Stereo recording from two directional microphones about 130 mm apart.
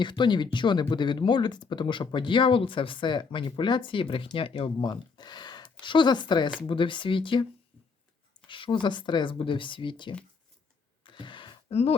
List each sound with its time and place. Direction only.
0.0 s speech: 35° left (ahead or behind)
8.4 s speech: 40° left (ahead or behind)
11.0 s a sound: 40° left (ahead or behind)